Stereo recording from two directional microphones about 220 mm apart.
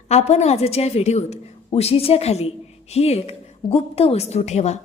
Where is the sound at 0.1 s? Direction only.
30° left (ahead or behind).